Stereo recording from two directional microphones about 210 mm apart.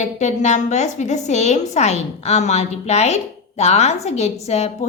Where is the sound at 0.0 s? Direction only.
35° left (ahead or behind).